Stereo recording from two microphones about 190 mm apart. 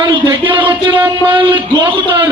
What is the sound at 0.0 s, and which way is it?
A man's voice, 25° right (ahead or behind).